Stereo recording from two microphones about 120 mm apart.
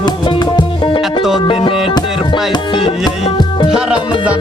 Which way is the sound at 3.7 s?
5° right (ahead or behind).